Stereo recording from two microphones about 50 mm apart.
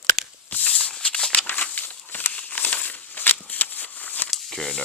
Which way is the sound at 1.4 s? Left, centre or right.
Left.